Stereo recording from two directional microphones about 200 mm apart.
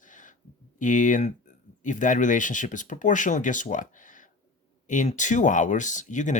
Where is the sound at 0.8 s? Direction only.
40° left (ahead or behind).